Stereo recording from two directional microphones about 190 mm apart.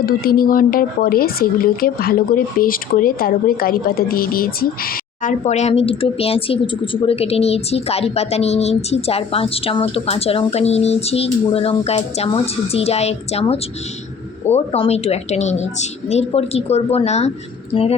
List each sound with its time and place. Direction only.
0.0 s speech: 50° left (ahead or behind)
5.5 s speech: 35° left (ahead or behind)